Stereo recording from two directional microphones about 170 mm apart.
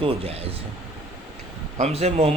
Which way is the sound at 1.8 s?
40° right (ahead or behind).